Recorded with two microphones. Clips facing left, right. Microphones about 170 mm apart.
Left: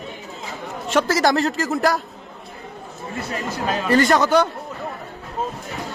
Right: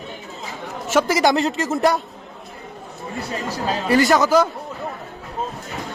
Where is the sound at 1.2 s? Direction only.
Centre (ahead or behind).